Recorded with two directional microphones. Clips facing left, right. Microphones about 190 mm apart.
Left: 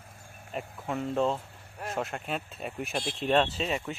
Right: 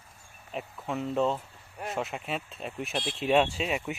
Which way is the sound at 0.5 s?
Centre (ahead or behind).